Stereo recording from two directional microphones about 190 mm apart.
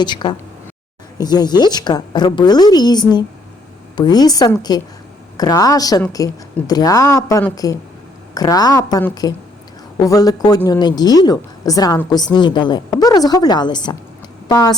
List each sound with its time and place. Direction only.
0.0 s a woman's voice: 25° left (ahead or behind)